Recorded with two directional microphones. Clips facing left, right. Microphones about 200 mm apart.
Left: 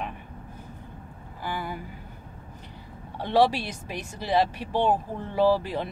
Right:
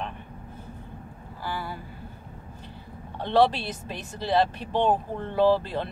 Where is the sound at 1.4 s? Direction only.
15° left (ahead or behind).